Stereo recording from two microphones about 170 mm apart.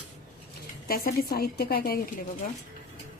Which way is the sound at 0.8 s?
60° left (ahead or behind).